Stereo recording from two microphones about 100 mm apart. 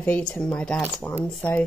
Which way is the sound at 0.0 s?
15° left (ahead or behind).